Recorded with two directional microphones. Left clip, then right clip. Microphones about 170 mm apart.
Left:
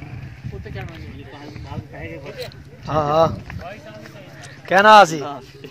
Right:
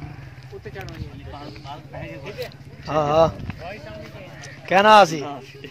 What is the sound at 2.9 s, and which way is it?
Speech, 15° left (ahead or behind).